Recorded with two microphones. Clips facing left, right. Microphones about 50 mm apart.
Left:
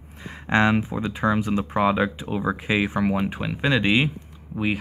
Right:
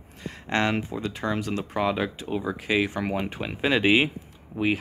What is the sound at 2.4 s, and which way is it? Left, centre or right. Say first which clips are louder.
Speech: left 2 dB; centre.